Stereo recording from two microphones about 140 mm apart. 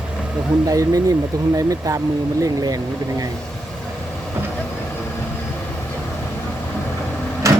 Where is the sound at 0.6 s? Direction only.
25° right (ahead or behind).